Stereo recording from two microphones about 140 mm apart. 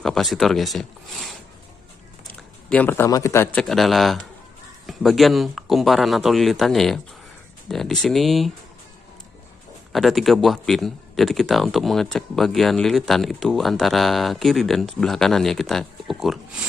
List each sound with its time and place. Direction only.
0.0 s speech: centre (ahead or behind)
2.7 s a man's voice: 10° left (ahead or behind)
3.5 s speech: centre (ahead or behind)
9.9 s speech: centre (ahead or behind)